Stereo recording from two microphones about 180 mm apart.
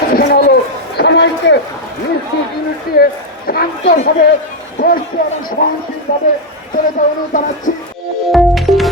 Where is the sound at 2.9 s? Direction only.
55° left (ahead or behind).